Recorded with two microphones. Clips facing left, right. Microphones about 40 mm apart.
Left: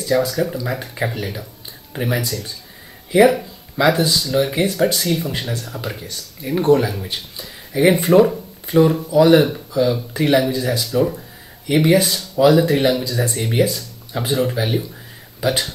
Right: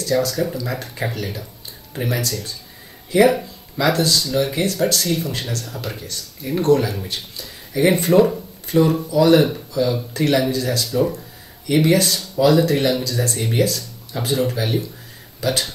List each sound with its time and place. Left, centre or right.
0.0 s speech: centre